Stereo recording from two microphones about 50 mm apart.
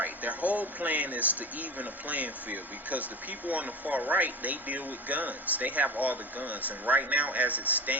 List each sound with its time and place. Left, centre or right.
0.0 s speech: right